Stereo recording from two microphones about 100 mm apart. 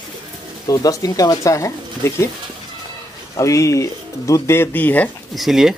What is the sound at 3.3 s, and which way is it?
Speech, 30° left (ahead or behind).